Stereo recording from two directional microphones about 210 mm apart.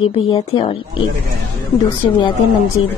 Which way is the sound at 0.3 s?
20° left (ahead or behind).